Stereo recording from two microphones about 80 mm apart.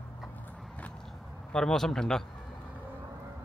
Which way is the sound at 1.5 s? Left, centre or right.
Centre.